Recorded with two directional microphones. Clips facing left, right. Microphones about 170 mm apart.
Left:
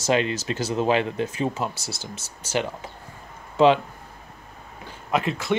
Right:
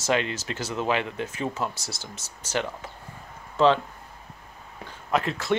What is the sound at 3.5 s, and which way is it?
Speech, 15° left (ahead or behind).